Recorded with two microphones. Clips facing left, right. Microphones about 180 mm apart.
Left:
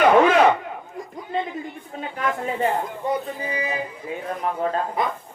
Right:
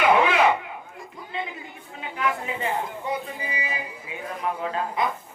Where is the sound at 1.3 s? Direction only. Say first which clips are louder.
Left 7 dB; 45° left (ahead or behind).